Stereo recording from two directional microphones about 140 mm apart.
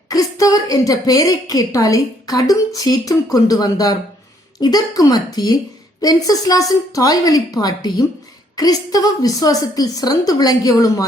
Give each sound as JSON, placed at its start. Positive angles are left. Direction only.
{"t": 0.1, "sound": "a woman's voice", "side_deg": 25}